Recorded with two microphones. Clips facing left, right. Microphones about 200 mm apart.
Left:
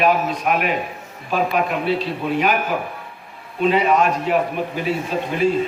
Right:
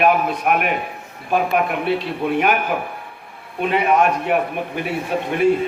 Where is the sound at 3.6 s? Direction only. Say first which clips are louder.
Left 1 dB; 60° right (ahead or behind).